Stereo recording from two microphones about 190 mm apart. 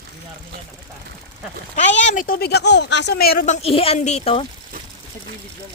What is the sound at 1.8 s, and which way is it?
Speech, 40° left (ahead or behind).